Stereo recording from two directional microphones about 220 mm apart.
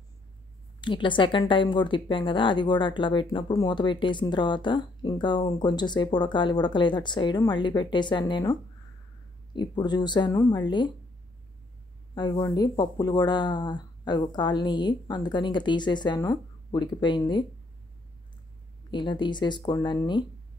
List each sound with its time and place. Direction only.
0.7 s speech: 20° left (ahead or behind)
12.2 s speech: 15° left (ahead or behind)
18.9 s speech: 20° left (ahead or behind)